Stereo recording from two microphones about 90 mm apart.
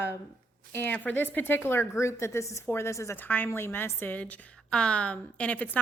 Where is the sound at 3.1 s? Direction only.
20° left (ahead or behind).